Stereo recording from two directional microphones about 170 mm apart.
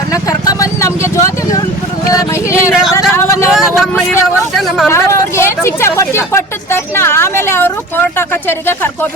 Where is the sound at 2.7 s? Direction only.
Centre (ahead or behind).